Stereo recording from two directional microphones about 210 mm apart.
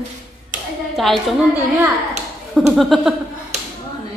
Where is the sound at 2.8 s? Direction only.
Centre (ahead or behind).